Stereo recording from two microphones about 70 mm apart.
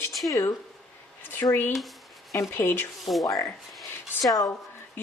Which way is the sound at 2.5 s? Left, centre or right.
Left.